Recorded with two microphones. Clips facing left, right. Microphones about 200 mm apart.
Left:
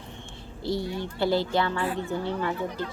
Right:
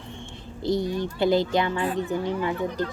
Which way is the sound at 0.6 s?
20° right (ahead or behind).